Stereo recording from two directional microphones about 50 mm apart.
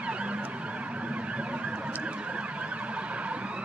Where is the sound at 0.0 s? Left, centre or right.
Right.